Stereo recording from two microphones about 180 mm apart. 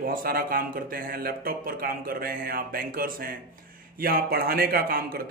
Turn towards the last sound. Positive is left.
turn(degrees=-55)  # may be behind; listen again after turning